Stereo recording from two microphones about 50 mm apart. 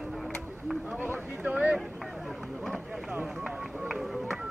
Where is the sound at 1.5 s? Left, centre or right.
Centre.